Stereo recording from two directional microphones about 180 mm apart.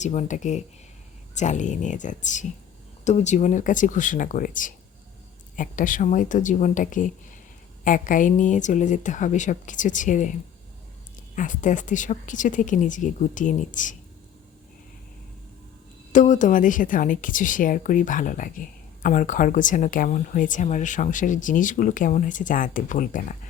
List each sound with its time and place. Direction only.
0.0 s speech: 40° left (ahead or behind)
11.3 s speech: 45° left (ahead or behind)
16.1 s speech: 45° left (ahead or behind)